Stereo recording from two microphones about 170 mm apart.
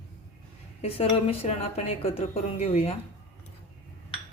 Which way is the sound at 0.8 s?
35° left (ahead or behind).